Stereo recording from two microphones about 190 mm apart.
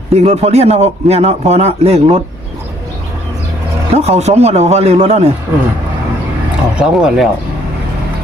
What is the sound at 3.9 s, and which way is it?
A man's voice, 35° right (ahead or behind).